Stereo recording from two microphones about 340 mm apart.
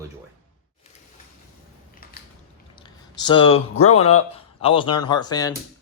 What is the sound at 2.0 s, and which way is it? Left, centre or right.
Biting, left.